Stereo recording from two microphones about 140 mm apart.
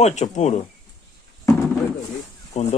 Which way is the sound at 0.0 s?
50° left (ahead or behind).